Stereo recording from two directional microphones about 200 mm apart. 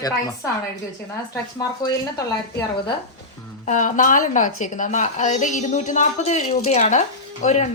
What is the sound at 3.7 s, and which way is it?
A woman's voice, 40° left (ahead or behind).